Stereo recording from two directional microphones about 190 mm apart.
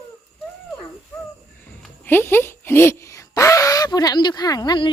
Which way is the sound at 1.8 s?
10° left (ahead or behind).